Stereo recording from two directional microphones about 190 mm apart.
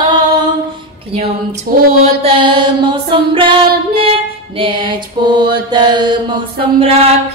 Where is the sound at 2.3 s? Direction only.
25° right (ahead or behind).